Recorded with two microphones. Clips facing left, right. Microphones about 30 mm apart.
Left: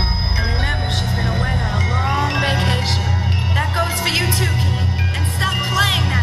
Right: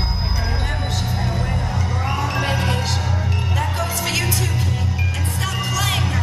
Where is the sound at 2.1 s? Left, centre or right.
Left.